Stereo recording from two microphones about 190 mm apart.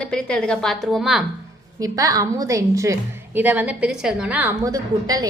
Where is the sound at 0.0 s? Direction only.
5° left (ahead or behind).